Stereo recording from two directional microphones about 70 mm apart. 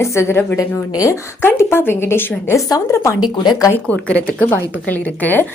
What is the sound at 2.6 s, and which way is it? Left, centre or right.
Speech, left.